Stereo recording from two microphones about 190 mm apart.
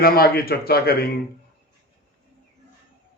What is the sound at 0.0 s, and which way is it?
A man's voice, 50° left (ahead or behind).